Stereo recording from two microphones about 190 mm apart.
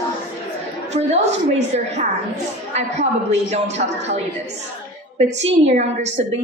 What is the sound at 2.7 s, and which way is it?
A woman's voice, 35° right (ahead or behind).